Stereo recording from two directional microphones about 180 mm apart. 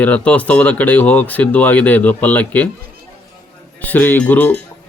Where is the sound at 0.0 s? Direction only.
10° left (ahead or behind).